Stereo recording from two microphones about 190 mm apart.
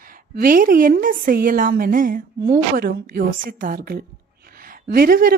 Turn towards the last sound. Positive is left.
turn(degrees=-50)  # may be behind; listen again after turning